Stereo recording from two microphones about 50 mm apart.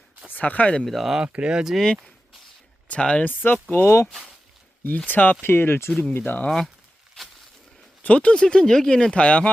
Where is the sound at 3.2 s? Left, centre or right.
Left.